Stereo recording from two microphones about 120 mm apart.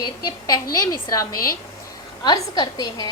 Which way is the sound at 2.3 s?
35° left (ahead or behind).